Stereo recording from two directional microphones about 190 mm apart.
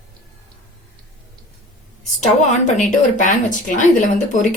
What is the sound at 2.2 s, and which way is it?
Speech, 40° left (ahead or behind).